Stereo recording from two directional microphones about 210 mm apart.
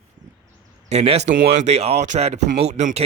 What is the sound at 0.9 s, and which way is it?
Speech, 30° right (ahead or behind).